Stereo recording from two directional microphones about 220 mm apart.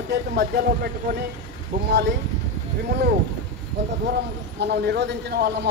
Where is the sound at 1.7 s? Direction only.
40° right (ahead or behind).